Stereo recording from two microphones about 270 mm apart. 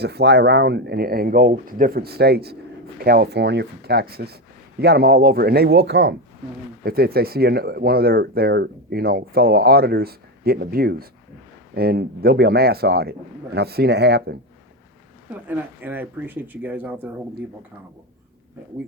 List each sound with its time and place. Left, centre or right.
0.0 s speech: right
15.3 s speech: centre